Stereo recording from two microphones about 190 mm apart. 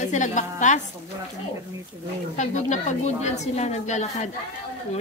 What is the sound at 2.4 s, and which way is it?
A woman's voice, 40° left (ahead or behind).